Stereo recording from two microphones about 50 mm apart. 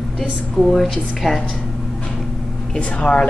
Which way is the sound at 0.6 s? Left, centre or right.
Centre.